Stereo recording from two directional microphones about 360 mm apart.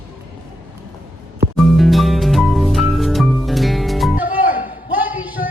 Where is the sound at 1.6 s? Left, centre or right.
Centre.